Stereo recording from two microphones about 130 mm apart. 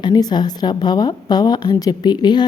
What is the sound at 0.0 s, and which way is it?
A woman's voice, 35° left (ahead or behind).